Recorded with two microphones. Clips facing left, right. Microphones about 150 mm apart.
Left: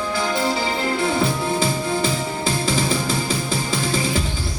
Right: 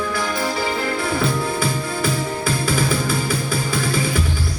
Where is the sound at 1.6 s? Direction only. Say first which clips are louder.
Left 1 dB; 25° left (ahead or behind).